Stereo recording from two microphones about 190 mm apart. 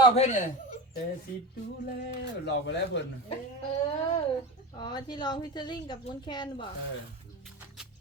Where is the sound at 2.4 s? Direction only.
65° left (ahead or behind).